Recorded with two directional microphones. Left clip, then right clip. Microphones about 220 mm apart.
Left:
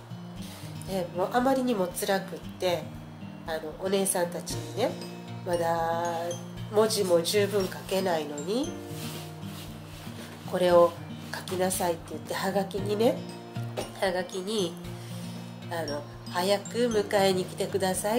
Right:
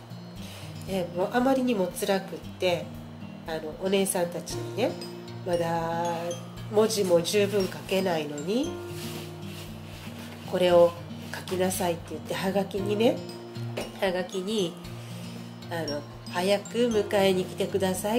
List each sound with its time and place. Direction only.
0.9 s speech: 5° right (ahead or behind)
3.4 s speech: 5° right (ahead or behind)
10.5 s speech: 10° right (ahead or behind)
15.7 s speech: 5° right (ahead or behind)